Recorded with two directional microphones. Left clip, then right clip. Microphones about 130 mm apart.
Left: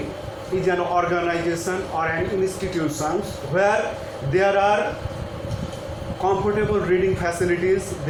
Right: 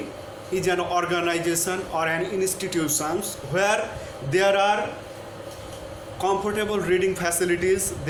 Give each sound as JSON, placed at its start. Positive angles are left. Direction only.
{"t": 0.6, "sound": "a man's voice", "side_deg": -45}
{"t": 6.2, "sound": "a man's voice", "side_deg": -45}